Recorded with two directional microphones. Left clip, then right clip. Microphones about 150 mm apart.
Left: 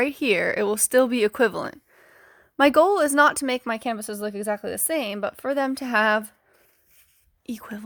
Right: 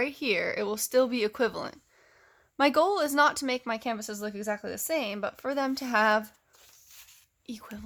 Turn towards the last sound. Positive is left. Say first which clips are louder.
# left 7 dB
turn(degrees=50)  # may be behind; listen again after turning